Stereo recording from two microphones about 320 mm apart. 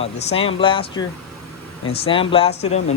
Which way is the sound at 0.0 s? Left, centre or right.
Centre.